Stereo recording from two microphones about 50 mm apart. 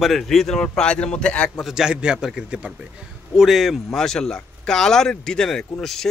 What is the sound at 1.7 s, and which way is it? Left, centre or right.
A man's voice, centre.